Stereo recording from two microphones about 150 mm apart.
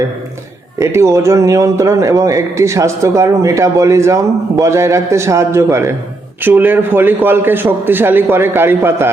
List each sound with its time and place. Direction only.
0.8 s a man's voice: 20° right (ahead or behind)